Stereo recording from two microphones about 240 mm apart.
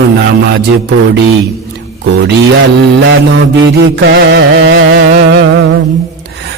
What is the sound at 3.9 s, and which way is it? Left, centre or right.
Music, right.